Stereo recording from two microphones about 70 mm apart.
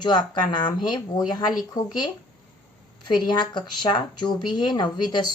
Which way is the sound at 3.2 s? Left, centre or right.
Left.